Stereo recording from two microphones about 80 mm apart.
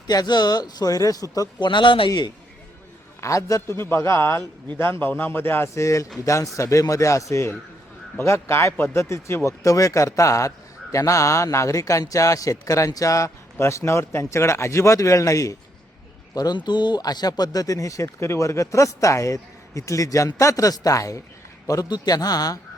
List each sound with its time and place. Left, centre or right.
0.1 s speech: left
1.6 s a man's voice: left
2.0 s speech: left
3.2 s a man's voice: left
16.3 s speech: left
16.6 s speech: left